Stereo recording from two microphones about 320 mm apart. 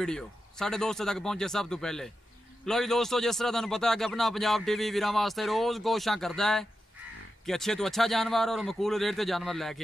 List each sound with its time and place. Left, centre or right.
0.0 s a man's voice: centre